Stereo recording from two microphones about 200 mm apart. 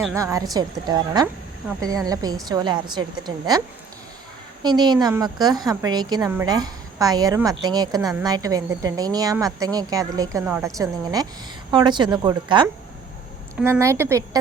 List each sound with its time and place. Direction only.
0.1 s a woman's voice: 15° right (ahead or behind)
4.6 s a woman's voice: 20° right (ahead or behind)